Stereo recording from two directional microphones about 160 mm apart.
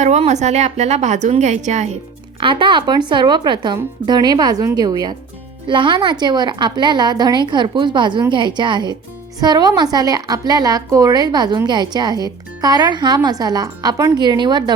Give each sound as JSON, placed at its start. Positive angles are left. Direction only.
{"t": 0.0, "sound": "a woman's voice", "side_deg": -45}
{"t": 2.4, "sound": "a woman's voice", "side_deg": -30}